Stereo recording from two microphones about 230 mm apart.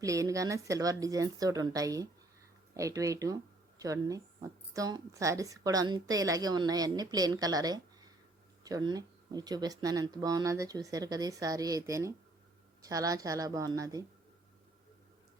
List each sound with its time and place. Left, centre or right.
0.0 s a woman's voice: centre